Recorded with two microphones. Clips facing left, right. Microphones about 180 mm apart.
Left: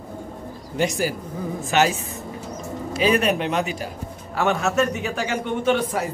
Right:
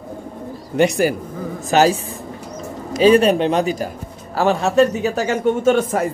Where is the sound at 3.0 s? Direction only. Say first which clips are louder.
Right 8 dB; 30° right (ahead or behind).